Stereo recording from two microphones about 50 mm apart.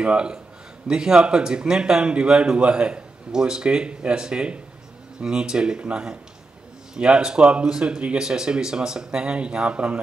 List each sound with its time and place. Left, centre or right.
0.0 s a man's voice: centre